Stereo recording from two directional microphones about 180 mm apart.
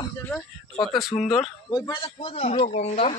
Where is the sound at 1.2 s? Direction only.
30° left (ahead or behind).